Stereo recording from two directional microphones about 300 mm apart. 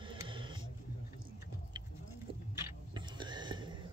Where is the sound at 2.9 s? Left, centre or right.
Centre.